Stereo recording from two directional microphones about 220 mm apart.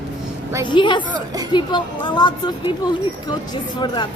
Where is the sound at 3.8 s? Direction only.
20° left (ahead or behind).